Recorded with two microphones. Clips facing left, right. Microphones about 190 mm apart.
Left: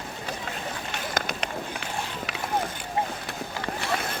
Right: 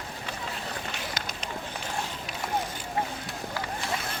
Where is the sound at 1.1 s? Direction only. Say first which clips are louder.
Left 7 dB; 65° left (ahead or behind).